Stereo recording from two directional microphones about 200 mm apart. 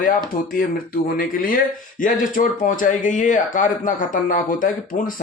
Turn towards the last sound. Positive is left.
turn(degrees=40)  # may be behind; listen again after turning